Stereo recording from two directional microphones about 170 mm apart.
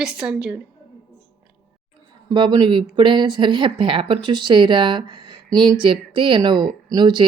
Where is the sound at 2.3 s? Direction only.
25° right (ahead or behind).